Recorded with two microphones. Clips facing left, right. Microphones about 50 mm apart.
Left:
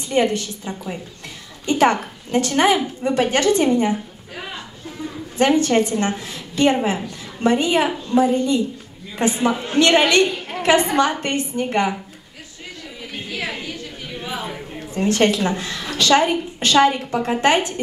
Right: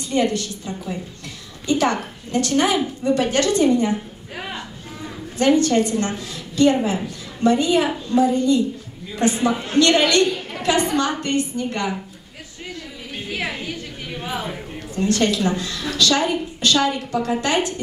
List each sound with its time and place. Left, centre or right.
0.1 s a woman's voice: left
5.4 s a woman's voice: left
14.8 s a woman's voice: left